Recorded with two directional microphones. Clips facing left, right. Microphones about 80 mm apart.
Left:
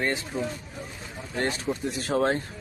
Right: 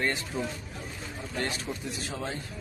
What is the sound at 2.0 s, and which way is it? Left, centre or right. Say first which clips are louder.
Speech: left 14 dB; left.